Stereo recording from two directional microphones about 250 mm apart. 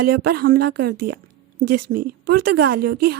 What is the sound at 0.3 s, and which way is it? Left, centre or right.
A woman's voice, right.